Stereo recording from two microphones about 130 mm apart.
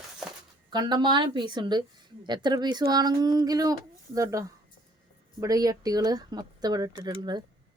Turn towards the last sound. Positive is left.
turn(degrees=-35)  # may be behind; listen again after turning